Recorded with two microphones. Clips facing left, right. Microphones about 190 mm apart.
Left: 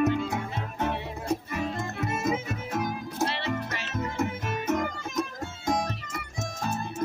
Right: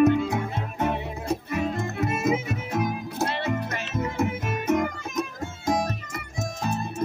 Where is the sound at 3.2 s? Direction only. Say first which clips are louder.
Right 2 dB; 50° right (ahead or behind).